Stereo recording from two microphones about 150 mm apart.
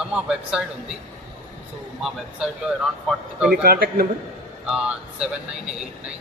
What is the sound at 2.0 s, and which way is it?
A man's voice, 5° right (ahead or behind).